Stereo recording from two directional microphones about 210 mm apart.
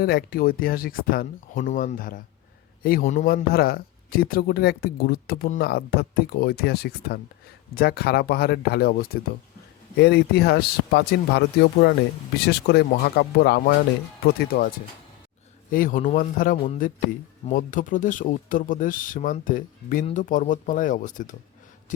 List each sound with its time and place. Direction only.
0.0 s speech: 45° left (ahead or behind)
15.7 s speech: 40° left (ahead or behind)